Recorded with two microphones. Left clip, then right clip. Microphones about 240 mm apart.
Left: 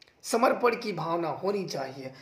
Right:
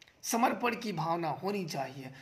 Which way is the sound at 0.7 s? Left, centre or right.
Right.